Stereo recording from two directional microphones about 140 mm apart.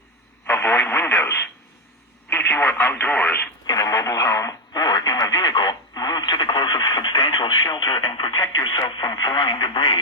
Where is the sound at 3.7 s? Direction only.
25° left (ahead or behind).